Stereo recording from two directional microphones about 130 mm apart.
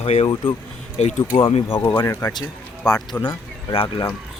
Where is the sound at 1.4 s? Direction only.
45° left (ahead or behind).